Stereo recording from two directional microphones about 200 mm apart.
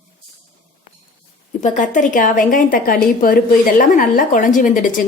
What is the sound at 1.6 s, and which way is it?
A woman's voice, 40° left (ahead or behind).